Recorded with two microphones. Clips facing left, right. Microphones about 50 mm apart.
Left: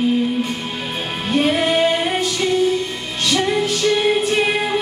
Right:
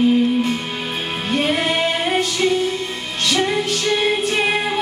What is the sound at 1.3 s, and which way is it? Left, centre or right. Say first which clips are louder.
Music: left 3 dB; centre.